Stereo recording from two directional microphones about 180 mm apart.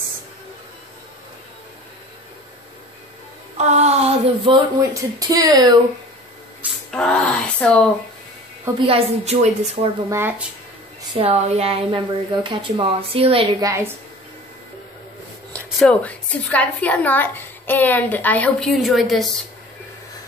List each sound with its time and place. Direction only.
3.5 s speech: 40° right (ahead or behind)
4.9 s speech: 20° right (ahead or behind)
6.9 s a sound: 5° left (ahead or behind)
8.7 s a woman's voice: 30° right (ahead or behind)
10.0 s speech: 15° right (ahead or behind)
11.1 s speech: 35° right (ahead or behind)
15.5 s a woman's voice: 5° left (ahead or behind)